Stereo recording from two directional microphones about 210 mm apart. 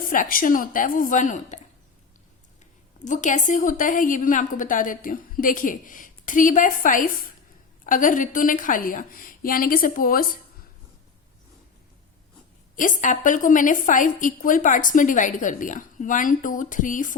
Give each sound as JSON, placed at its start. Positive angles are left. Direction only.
{"t": 0.1, "sound": "a woman's voice", "side_deg": 40}
{"t": 3.0, "sound": "a woman's voice", "side_deg": 35}
{"t": 12.7, "sound": "a woman's voice", "side_deg": 40}